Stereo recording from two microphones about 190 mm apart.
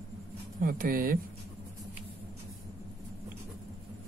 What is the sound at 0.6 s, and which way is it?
Speech, 50° right (ahead or behind).